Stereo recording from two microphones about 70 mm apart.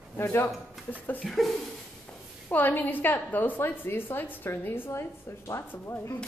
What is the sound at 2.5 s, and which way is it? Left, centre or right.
A woman's voice, left.